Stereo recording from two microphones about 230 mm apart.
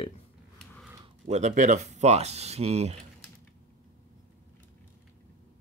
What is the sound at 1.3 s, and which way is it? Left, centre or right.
Speech, right.